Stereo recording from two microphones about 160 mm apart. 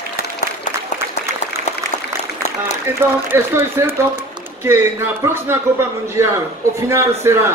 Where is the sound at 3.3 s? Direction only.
15° right (ahead or behind).